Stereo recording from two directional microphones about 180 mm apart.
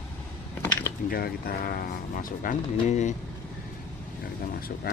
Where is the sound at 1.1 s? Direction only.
55° left (ahead or behind).